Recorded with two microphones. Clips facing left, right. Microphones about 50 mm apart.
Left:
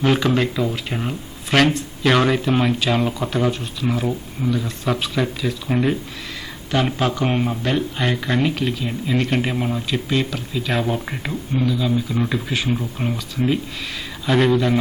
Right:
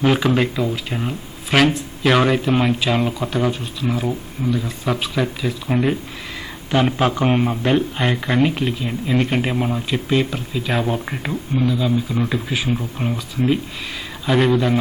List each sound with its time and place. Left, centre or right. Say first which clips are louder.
0.0 s speech: right 1 dB; centre
14.3 s speech: even; centre